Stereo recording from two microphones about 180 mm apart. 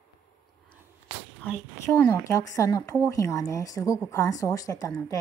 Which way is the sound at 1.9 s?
15° left (ahead or behind).